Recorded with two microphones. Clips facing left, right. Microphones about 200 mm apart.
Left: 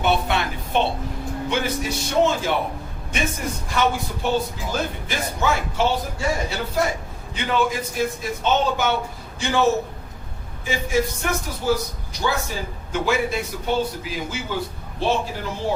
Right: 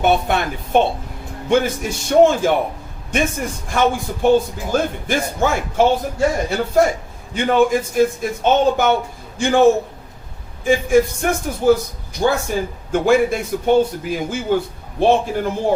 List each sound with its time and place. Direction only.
0.0 s a man's voice: 50° right (ahead or behind)
10.7 s a man's voice: 50° right (ahead or behind)